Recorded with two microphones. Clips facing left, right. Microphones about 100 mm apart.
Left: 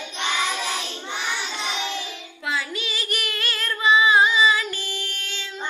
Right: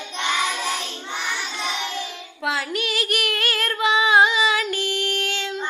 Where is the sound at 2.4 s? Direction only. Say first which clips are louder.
Right 3 dB; 70° right (ahead or behind).